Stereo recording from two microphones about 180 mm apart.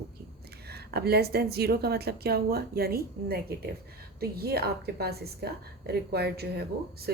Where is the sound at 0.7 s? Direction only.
60° right (ahead or behind).